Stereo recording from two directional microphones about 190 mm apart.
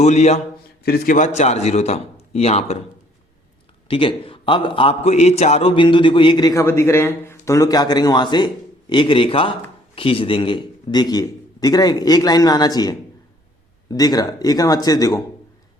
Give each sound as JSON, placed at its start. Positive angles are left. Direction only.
{"t": 0.0, "sound": "a man's voice", "side_deg": 35}
{"t": 0.9, "sound": "a man's voice", "side_deg": 50}
{"t": 3.8, "sound": "a man's voice", "side_deg": 25}